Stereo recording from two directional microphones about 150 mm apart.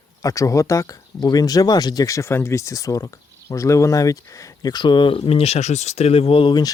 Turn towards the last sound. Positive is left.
turn(degrees=30)  # may be behind; listen again after turning